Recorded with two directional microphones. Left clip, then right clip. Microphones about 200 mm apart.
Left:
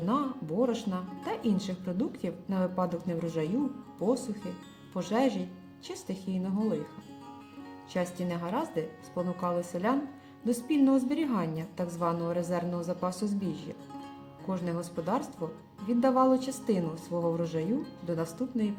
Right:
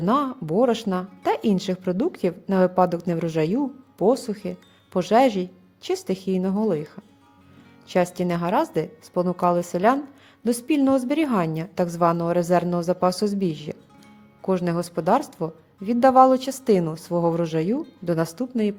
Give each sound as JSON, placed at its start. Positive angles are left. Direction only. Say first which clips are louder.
{"t": 0.0, "sound": "speech", "louder": "right 9 dB", "side_deg": -50}
{"t": 7.9, "sound": "speech", "louder": "right 11 dB", "side_deg": -50}